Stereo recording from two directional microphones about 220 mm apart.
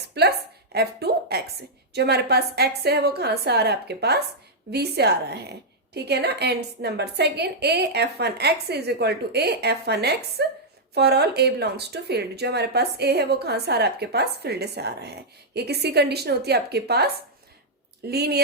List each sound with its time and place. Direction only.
0.1 s a sound: 45° right (ahead or behind)
1.9 s a woman's voice: 50° right (ahead or behind)
18.1 s a woman's voice: 45° right (ahead or behind)